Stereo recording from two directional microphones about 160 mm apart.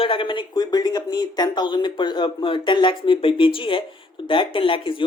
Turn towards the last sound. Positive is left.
turn(degrees=35)  # may be behind; listen again after turning